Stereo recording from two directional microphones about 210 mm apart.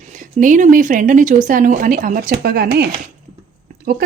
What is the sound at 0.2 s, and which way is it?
Speech, 40° right (ahead or behind).